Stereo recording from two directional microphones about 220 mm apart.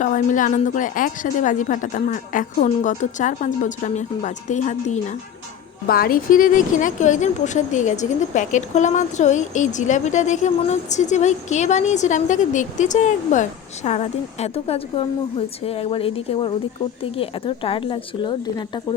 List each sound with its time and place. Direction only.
0.0 s a woman's voice: 35° left (ahead or behind); by 18.9 s 20° left (ahead or behind)